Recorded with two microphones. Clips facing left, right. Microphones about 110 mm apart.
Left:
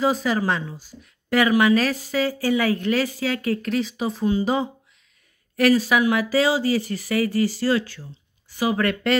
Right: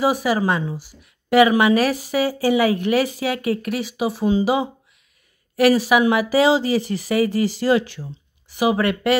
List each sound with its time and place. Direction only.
0.0 s speech: 10° right (ahead or behind)